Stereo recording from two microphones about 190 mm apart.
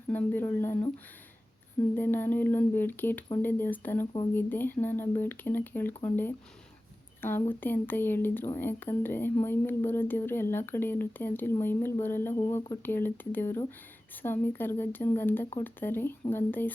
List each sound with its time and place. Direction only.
0.1 s speech: 10° left (ahead or behind)
2.0 s speech: 10° left (ahead or behind)